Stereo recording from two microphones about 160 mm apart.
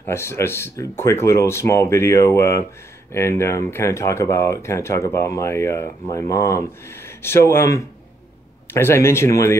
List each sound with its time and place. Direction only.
0.0 s speech: 15° left (ahead or behind)